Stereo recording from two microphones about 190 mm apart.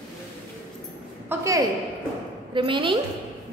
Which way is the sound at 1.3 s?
15° right (ahead or behind).